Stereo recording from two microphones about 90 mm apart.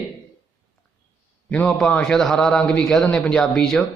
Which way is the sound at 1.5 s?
15° left (ahead or behind).